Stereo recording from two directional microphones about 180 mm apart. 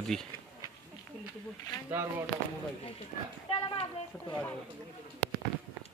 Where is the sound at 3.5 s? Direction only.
30° left (ahead or behind).